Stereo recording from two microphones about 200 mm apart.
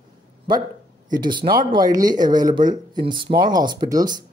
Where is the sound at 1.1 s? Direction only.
20° right (ahead or behind).